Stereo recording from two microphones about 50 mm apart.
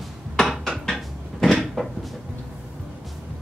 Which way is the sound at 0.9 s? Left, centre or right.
Centre.